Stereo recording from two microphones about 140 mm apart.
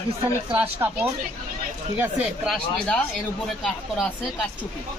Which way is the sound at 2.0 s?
5° right (ahead or behind).